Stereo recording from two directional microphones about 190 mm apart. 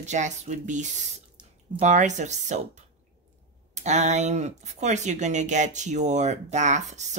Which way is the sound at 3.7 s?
35° right (ahead or behind).